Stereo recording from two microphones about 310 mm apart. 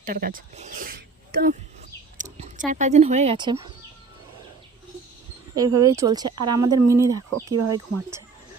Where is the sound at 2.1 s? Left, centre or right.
Right.